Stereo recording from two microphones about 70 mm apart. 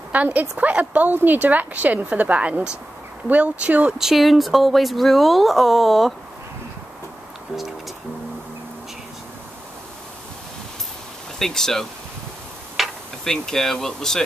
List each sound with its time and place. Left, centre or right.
0.1 s a woman's voice: right
4.0 s speech: centre
11.3 s speech: centre
12.7 s a sound: centre